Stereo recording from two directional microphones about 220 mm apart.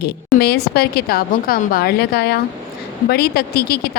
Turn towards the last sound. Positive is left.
turn(degrees=45)  # may be behind; listen again after turning